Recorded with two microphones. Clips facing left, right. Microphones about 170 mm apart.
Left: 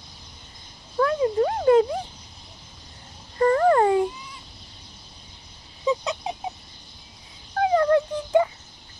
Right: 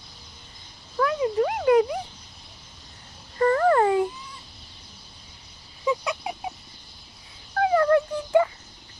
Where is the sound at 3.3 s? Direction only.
20° left (ahead or behind).